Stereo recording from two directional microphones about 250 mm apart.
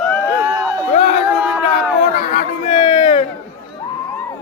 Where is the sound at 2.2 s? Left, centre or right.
Left.